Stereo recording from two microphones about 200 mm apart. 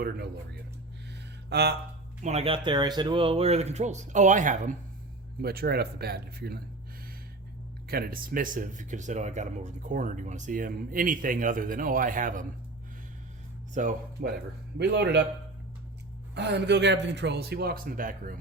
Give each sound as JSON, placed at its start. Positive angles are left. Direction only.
{"t": 1.5, "sound": "a sound", "side_deg": -55}
{"t": 2.2, "sound": "speech", "side_deg": -30}
{"t": 5.4, "sound": "speech", "side_deg": -50}
{"t": 7.9, "sound": "speech", "side_deg": -50}
{"t": 13.7, "sound": "speech", "side_deg": -45}
{"t": 14.8, "sound": "a man's voice", "side_deg": -60}
{"t": 16.3, "sound": "a man's voice", "side_deg": -60}